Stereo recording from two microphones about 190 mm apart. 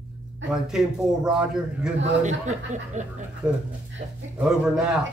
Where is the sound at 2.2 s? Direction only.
40° right (ahead or behind).